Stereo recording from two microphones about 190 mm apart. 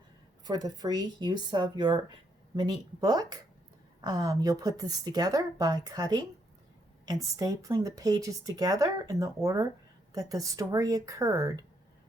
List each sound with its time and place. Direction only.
0.4 s a woman's voice: 20° right (ahead or behind)